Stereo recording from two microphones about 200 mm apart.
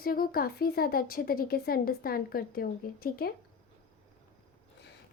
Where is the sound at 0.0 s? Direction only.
50° left (ahead or behind).